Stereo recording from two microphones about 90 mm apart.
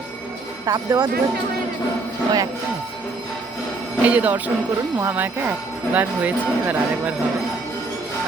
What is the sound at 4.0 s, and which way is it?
Speech, 15° right (ahead or behind).